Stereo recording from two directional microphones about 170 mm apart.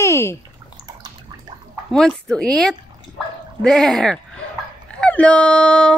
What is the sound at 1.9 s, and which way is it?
Speech, 5° left (ahead or behind).